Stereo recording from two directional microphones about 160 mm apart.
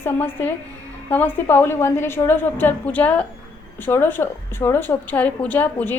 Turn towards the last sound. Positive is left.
turn(degrees=10)  # may be behind; listen again after turning